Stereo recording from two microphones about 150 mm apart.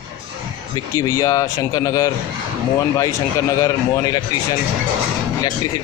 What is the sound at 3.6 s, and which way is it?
Speech, 25° left (ahead or behind).